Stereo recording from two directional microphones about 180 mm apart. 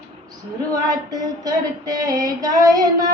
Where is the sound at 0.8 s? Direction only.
20° right (ahead or behind).